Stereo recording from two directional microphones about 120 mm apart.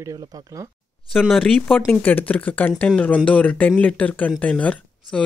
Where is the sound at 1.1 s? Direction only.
Centre (ahead or behind).